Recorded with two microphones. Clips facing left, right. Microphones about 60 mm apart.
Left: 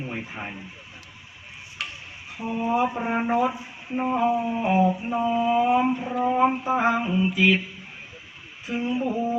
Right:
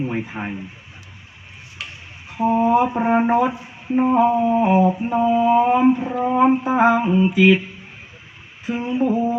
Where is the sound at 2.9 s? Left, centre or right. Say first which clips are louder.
Right 7 dB; right.